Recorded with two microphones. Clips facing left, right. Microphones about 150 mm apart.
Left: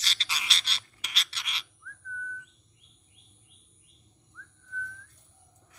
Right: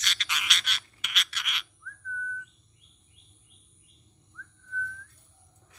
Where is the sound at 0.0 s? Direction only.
30° left (ahead or behind).